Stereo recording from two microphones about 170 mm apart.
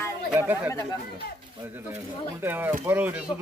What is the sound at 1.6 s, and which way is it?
Speech, 10° right (ahead or behind).